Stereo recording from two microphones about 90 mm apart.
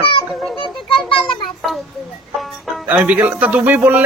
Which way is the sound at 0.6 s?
65° left (ahead or behind).